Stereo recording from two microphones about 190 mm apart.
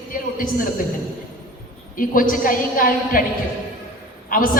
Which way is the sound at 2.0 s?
45° left (ahead or behind).